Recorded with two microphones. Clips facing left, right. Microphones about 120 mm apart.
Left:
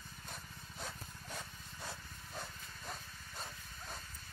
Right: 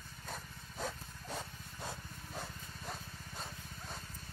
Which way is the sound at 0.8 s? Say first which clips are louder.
Right 6 dB; 30° right (ahead or behind).